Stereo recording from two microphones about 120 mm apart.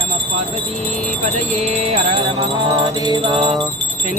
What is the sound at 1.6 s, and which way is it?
Music, 70° right (ahead or behind).